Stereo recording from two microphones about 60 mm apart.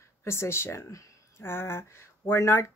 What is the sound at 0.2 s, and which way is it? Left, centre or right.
Speech, left.